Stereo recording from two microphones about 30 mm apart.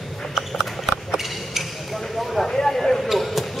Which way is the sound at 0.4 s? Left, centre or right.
Centre.